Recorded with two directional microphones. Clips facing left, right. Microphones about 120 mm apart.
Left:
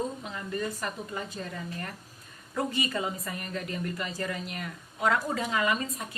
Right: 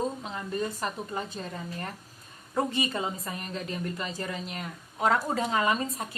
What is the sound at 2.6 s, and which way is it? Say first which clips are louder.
A woman's voice: right 2 dB; 25° right (ahead or behind).